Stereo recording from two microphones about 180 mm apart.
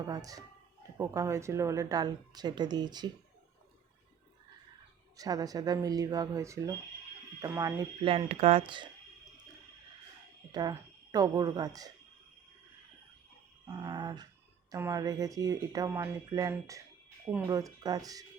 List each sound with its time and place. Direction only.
0.1 s a woman's voice: 20° right (ahead or behind)
5.1 s a woman's voice: 20° right (ahead or behind)
10.5 s speech: 20° right (ahead or behind)
13.8 s a woman's voice: 25° right (ahead or behind)